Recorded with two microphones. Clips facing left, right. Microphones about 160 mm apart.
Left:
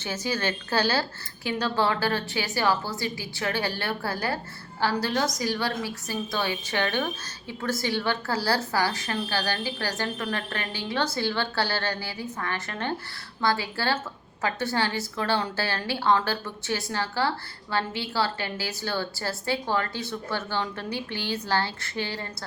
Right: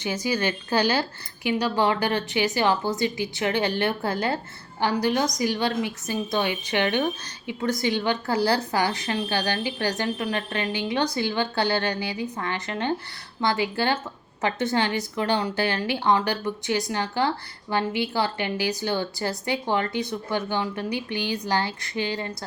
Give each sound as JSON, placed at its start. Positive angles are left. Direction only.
{"t": 0.0, "sound": "a woman's voice", "side_deg": -15}